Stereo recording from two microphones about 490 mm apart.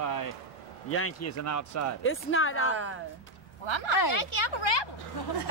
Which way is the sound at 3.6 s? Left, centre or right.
Left.